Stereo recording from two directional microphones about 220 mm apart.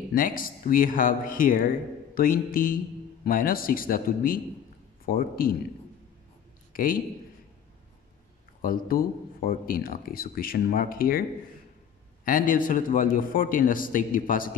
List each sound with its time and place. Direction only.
0.1 s speech: 40° left (ahead or behind)
6.7 s a sound: 40° left (ahead or behind)
8.5 s speech: 40° left (ahead or behind)
12.3 s speech: 40° left (ahead or behind)